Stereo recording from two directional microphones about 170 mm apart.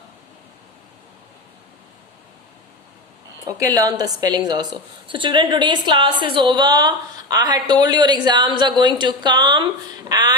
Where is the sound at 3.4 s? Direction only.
20° right (ahead or behind).